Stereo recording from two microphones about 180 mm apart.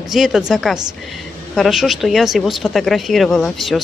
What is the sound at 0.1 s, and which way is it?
Speech, centre (ahead or behind).